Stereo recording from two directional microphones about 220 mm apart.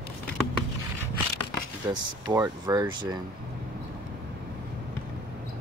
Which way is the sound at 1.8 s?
15° right (ahead or behind).